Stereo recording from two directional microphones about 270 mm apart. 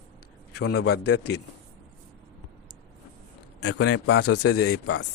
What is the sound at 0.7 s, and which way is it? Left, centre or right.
Speech, left.